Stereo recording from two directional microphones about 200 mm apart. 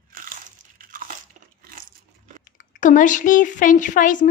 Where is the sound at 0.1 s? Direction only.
45° right (ahead or behind).